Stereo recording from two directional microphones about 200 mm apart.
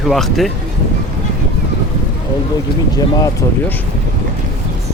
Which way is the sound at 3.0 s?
15° left (ahead or behind).